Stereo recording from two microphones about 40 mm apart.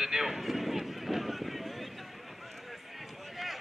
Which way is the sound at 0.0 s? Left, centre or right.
Centre.